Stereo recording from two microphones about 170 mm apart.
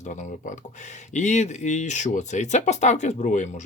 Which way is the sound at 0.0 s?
45° left (ahead or behind).